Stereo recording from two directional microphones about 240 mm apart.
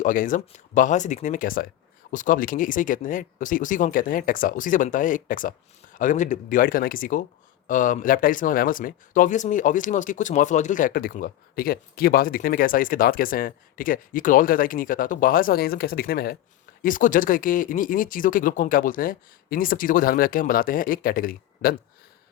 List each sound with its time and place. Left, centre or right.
0.0 s speech: left